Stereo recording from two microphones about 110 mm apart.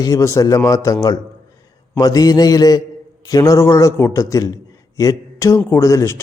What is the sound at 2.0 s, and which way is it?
A man's voice, 35° left (ahead or behind).